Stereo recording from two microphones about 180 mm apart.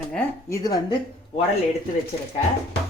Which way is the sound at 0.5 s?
20° left (ahead or behind).